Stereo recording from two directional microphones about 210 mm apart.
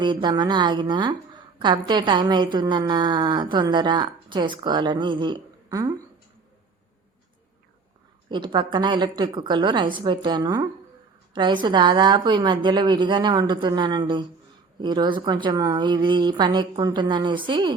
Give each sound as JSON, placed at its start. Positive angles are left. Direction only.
{"t": 0.0, "sound": "a woman's voice", "side_deg": -20}
{"t": 8.3, "sound": "a woman's voice", "side_deg": -20}